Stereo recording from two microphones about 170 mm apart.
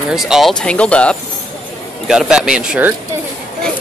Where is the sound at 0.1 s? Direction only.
Centre (ahead or behind).